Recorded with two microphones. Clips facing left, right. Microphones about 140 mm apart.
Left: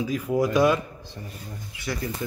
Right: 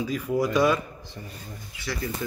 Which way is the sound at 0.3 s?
15° left (ahead or behind).